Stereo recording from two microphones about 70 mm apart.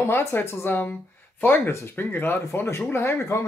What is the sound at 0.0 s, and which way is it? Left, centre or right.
Speech, left.